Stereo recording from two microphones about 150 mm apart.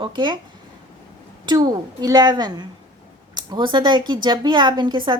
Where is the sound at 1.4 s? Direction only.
25° right (ahead or behind).